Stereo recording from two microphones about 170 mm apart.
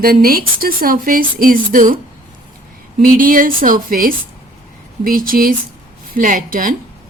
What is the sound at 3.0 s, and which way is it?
A woman's voice, 55° right (ahead or behind).